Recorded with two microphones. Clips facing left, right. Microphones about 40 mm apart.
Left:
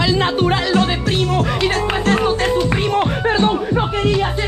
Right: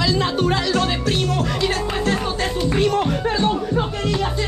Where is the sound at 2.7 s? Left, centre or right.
Left.